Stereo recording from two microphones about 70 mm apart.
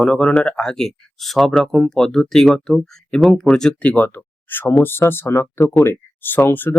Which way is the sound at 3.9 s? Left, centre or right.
Left.